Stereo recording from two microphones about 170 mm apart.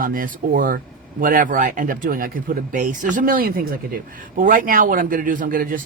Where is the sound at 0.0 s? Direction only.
55° right (ahead or behind).